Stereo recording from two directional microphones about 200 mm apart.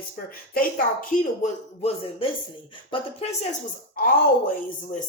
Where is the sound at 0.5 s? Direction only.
40° left (ahead or behind).